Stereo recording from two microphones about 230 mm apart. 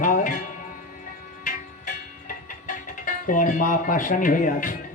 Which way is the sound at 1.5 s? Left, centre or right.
Left.